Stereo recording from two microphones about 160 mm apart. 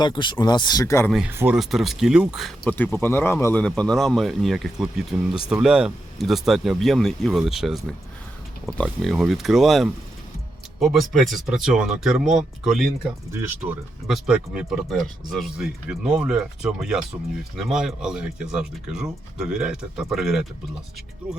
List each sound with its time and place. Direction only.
0.0 s speech: 30° left (ahead or behind)
1.3 s speech: 15° right (ahead or behind)
1.5 s speech: centre (ahead or behind)
2.6 s speech: 10° left (ahead or behind)
13.3 s speech: 15° right (ahead or behind)